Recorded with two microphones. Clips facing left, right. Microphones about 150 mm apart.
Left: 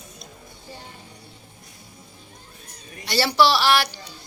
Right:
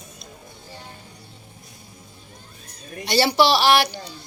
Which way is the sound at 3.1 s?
20° right (ahead or behind).